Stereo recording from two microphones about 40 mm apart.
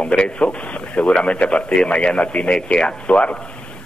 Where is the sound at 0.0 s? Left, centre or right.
Left.